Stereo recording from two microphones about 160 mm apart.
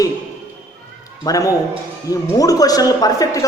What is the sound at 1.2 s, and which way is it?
A woman's voice, 20° left (ahead or behind).